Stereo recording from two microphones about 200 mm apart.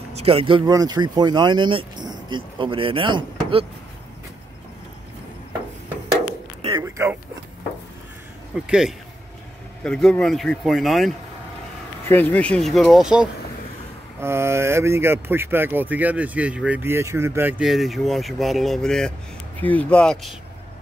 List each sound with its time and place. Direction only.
0.1 s speech: 30° right (ahead or behind)
6.8 s a sound: 15° right (ahead or behind)
8.6 s speech: 5° right (ahead or behind)